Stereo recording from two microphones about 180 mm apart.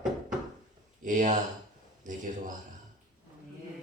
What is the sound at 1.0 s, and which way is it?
Speech, 45° right (ahead or behind).